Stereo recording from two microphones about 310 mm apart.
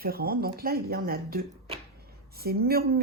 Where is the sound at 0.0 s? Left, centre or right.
Right.